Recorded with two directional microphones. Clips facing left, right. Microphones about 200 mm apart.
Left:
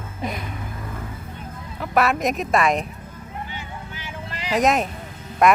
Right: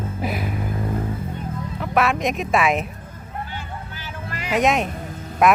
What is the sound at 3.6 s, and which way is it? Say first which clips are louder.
Vehicle: right 1 dB; 20° left (ahead or behind).